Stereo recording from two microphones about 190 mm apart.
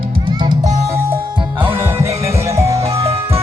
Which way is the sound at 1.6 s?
10° right (ahead or behind).